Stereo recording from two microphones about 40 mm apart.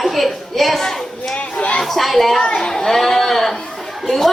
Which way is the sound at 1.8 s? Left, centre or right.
Centre.